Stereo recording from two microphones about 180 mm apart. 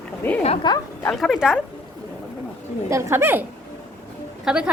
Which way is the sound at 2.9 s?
15° right (ahead or behind).